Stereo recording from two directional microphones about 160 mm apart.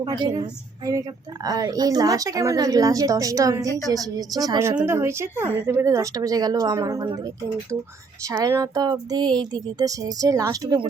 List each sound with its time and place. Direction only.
0.0 s speech: 25° right (ahead or behind)
1.5 s speech: 25° right (ahead or behind)
8.3 s speech: 20° right (ahead or behind)